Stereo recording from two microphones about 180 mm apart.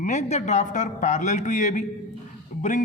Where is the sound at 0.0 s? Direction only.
40° left (ahead or behind).